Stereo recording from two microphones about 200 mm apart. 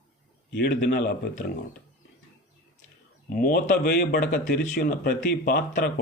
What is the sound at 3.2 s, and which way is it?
Speech, 45° left (ahead or behind).